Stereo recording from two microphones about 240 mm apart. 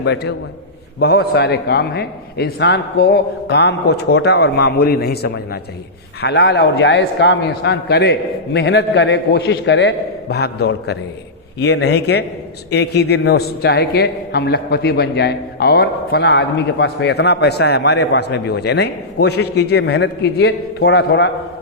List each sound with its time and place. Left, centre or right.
0.0 s a man's voice: left